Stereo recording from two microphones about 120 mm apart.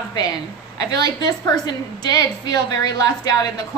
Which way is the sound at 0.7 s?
35° left (ahead or behind).